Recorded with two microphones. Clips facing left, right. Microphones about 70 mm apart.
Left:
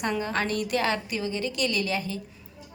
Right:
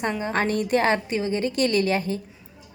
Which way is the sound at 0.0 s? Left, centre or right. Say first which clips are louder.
Right 3 dB; right.